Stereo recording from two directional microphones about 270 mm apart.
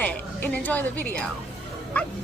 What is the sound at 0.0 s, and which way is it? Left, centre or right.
A woman's voice, centre.